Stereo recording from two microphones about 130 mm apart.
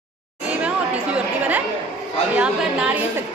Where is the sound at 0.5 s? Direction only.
10° right (ahead or behind).